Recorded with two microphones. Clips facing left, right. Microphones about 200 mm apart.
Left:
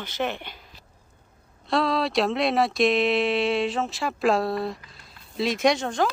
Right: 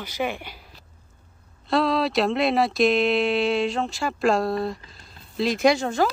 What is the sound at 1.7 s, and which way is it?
Speech, centre (ahead or behind).